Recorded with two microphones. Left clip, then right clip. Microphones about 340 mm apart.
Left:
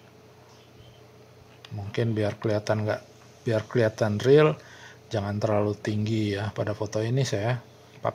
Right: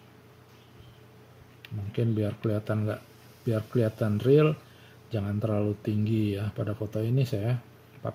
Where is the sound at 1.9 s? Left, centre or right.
Left.